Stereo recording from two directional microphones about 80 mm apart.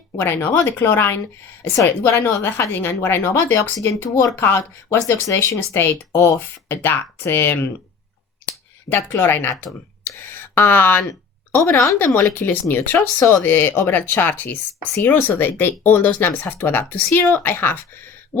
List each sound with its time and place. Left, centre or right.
0.2 s speech: left
8.9 s speech: left